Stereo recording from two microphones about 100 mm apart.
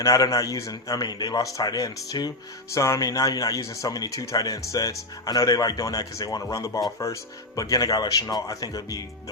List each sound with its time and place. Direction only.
0.0 s speech: 35° left (ahead or behind)